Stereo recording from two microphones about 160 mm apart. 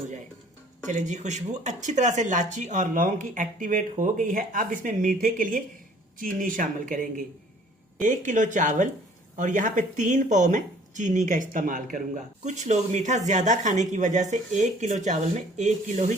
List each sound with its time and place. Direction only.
0.9 s speech: 50° right (ahead or behind)